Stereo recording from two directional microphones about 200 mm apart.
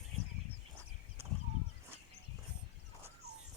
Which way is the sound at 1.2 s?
15° right (ahead or behind).